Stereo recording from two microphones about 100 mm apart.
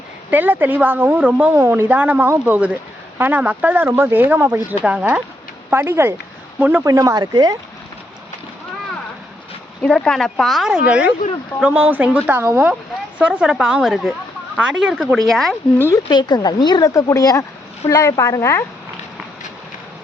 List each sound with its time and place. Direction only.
0.3 s a woman's voice: 20° right (ahead or behind)
1.5 s speech: 30° right (ahead or behind)
1.9 s a woman's voice: 15° right (ahead or behind)
5.7 s a woman's voice: 25° right (ahead or behind)
6.8 s speech: 35° right (ahead or behind)
9.8 s a woman's voice: 10° left (ahead or behind); by 12.4 s 10° right (ahead or behind)
12.4 s speech: 25° right (ahead or behind)
13.1 s a woman's voice: 10° right (ahead or behind)
16.0 s a woman's voice: 50° left (ahead or behind)
16.9 s speech: 35° left (ahead or behind)